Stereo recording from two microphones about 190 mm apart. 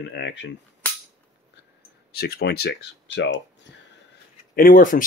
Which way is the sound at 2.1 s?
55° left (ahead or behind).